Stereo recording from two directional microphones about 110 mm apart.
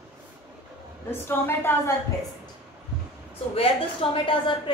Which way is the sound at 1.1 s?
20° left (ahead or behind).